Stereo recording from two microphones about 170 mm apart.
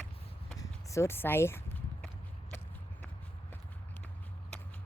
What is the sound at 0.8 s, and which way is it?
Speech, 15° left (ahead or behind).